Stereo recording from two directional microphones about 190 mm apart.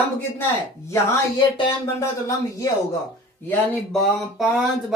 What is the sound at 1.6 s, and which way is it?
Speech, 15° left (ahead or behind).